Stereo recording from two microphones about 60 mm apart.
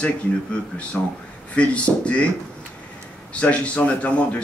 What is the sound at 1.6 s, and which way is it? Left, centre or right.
Speech, centre.